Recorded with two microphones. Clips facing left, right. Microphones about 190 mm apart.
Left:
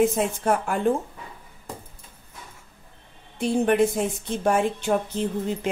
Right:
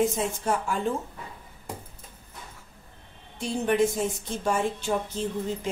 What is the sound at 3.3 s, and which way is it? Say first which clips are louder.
A woman's voice: left 4 dB; 60° left (ahead or behind).